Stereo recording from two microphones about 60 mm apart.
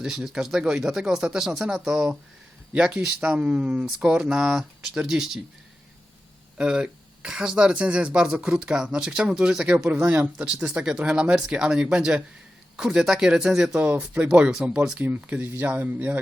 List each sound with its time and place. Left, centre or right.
0.0 s speech: centre
6.6 s speech: centre
13.7 s speech: right
15.0 s speech: right